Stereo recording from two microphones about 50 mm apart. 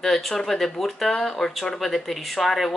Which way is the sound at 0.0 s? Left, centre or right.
Centre.